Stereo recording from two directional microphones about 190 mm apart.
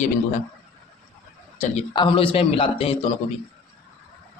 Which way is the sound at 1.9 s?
25° left (ahead or behind).